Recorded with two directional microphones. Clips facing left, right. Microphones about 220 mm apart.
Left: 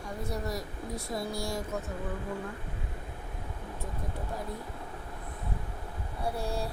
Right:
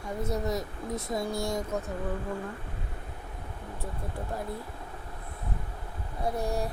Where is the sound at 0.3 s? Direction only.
20° right (ahead or behind).